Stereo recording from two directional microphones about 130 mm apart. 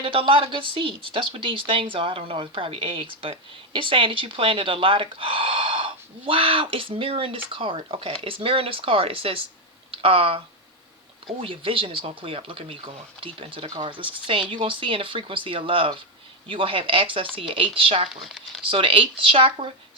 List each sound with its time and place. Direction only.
0.0 s speech: 45° right (ahead or behind)
18.2 s speech: centre (ahead or behind)
18.7 s speech: 45° right (ahead or behind)